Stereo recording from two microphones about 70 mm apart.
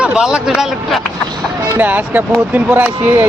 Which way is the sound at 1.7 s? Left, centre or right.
Right.